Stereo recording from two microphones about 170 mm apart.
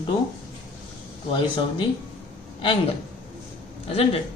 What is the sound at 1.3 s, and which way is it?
Speech, 30° left (ahead or behind).